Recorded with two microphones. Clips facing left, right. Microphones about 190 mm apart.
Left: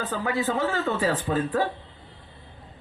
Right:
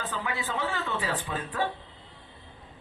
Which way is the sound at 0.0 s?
40° left (ahead or behind).